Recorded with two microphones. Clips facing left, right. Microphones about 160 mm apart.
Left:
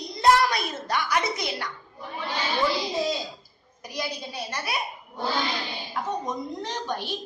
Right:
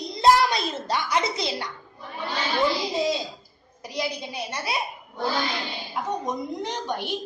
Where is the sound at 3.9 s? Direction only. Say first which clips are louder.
Right 3 dB; 20° right (ahead or behind).